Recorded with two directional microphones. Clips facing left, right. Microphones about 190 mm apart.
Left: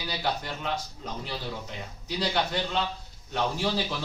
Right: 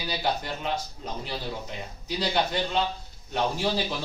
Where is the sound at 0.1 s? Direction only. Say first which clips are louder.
Right 2 dB; 10° right (ahead or behind).